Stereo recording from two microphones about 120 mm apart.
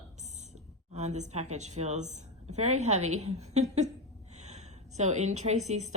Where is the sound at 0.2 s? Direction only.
70° right (ahead or behind).